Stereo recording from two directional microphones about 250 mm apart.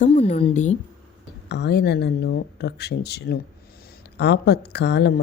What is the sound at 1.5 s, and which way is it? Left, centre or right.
Speech, left.